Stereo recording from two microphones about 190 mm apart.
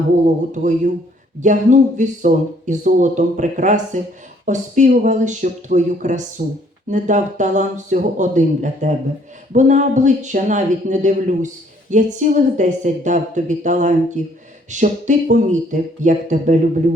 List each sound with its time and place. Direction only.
0.6 s speech: 40° right (ahead or behind)